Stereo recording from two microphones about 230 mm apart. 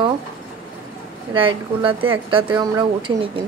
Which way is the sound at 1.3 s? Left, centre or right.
Right.